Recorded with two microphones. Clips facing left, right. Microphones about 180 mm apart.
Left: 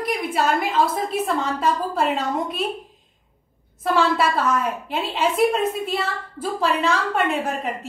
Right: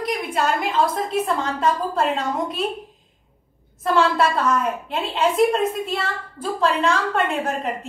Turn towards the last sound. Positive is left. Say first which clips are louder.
# right 1 dB
turn(degrees=0)  # may be behind; listen again after turning